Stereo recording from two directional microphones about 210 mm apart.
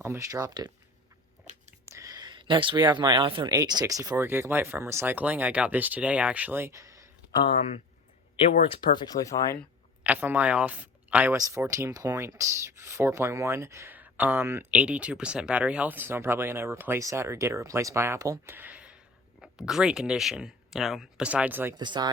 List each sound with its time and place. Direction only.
0.0 s speech: 15° right (ahead or behind)
1.9 s speech: 15° right (ahead or behind)
7.4 s speech: 30° left (ahead or behind)
10.0 s speech: 10° right (ahead or behind)
21.8 s speech: 20° right (ahead or behind)